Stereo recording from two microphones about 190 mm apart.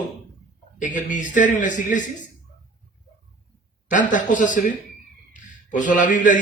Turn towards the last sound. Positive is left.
turn(degrees=40)  # may be behind; listen again after turning